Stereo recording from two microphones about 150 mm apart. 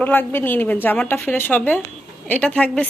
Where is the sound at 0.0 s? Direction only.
15° left (ahead or behind).